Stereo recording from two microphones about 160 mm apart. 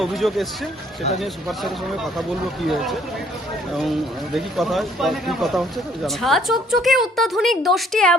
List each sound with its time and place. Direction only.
0.0 s speech: centre (ahead or behind)
4.4 s speech: centre (ahead or behind)